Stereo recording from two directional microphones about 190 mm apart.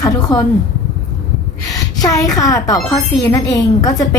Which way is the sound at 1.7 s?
20° left (ahead or behind).